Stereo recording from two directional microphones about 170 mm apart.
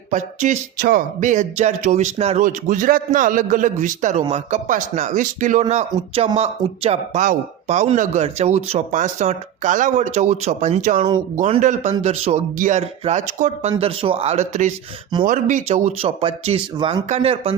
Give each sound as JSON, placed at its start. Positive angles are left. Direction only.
{"t": 0.1, "sound": "speech", "side_deg": -45}
{"t": 11.3, "sound": "speech", "side_deg": -35}